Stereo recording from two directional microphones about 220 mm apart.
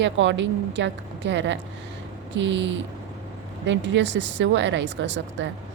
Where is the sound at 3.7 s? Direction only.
55° right (ahead or behind).